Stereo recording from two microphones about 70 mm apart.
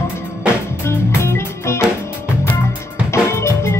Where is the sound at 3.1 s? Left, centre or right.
Left.